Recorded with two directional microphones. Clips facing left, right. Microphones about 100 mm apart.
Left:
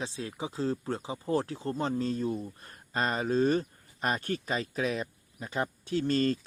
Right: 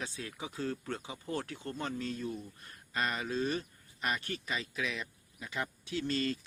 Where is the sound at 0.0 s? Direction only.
25° left (ahead or behind).